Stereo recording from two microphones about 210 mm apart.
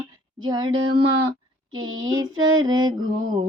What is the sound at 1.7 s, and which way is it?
Music, 70° right (ahead or behind).